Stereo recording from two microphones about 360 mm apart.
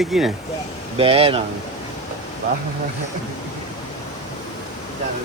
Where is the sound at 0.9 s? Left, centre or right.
Centre.